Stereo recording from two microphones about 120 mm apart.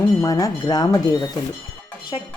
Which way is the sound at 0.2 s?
30° left (ahead or behind).